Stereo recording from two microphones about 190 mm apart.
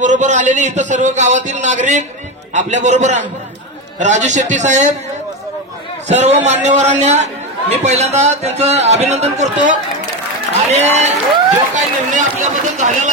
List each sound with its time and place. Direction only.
0.0 s speech: 40° right (ahead or behind)
6.0 s speech: 35° right (ahead or behind)